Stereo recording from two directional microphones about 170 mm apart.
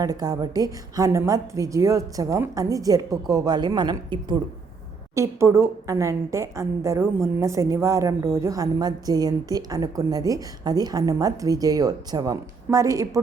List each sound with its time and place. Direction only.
0.0 s a woman's voice: 20° right (ahead or behind)